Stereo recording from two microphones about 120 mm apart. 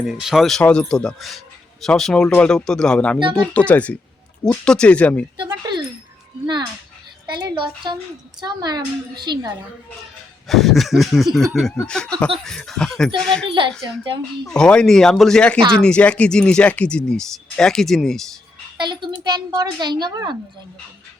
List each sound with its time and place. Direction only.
0.0 s speech: 5° right (ahead or behind)
5.4 s a sound: 40° right (ahead or behind)
7.3 s a woman's voice: 40° right (ahead or behind)
10.5 s speech: centre (ahead or behind)
18.8 s a woman's voice: 40° right (ahead or behind)